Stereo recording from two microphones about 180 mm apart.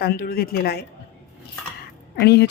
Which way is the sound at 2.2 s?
65° left (ahead or behind).